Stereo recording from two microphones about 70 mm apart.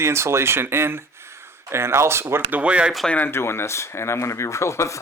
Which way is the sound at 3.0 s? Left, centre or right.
Left.